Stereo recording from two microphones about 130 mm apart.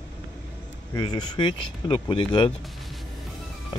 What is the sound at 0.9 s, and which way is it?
Speech, 30° left (ahead or behind).